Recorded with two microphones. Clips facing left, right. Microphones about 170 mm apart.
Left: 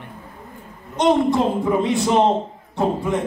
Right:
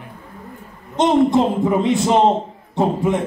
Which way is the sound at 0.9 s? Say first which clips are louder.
Right 2 dB; 20° right (ahead or behind).